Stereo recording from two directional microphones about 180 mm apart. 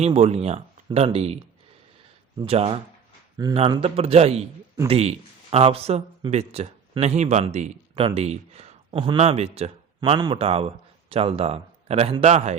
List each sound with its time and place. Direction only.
0.0 s speech: 35° right (ahead or behind)
2.4 s speech: 35° right (ahead or behind)
3.3 s speech: 20° right (ahead or behind); by 12.5 s 40° right (ahead or behind)